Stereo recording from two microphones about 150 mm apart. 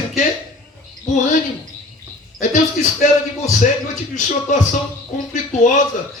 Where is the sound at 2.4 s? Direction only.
55° left (ahead or behind).